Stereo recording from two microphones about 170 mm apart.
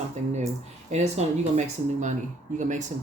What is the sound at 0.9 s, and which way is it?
Speech, 45° right (ahead or behind).